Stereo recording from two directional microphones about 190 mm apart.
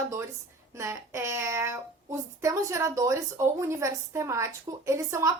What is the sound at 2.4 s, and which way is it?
A woman's voice, 15° right (ahead or behind).